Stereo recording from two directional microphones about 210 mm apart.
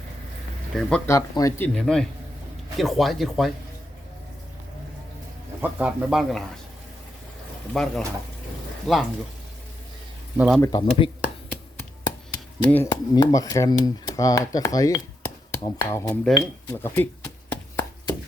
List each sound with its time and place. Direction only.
0.8 s speech: 5° left (ahead or behind)
5.6 s speech: 5° right (ahead or behind)
7.7 s speech: centre (ahead or behind)
10.3 s speech: 5° right (ahead or behind)
10.6 s speech: 20° left (ahead or behind)
12.0 s chop: 10° left (ahead or behind)
12.9 s speech: 20° left (ahead or behind)